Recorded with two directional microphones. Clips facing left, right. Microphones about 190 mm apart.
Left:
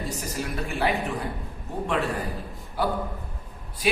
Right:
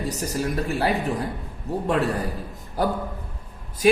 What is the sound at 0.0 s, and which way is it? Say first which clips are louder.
Speech: right 5 dB; 40° right (ahead or behind).